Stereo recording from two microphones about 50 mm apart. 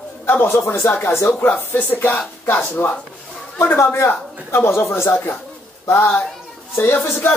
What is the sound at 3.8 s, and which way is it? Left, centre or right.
Speech, left.